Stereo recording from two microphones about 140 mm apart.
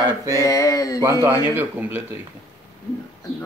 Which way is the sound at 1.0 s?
20° right (ahead or behind).